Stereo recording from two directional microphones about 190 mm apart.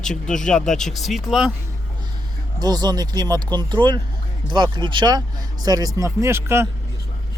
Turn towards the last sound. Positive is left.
turn(degrees=-15)  # may be behind; listen again after turning